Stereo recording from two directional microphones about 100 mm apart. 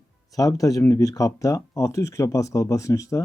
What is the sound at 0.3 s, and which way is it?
Speech, 35° left (ahead or behind).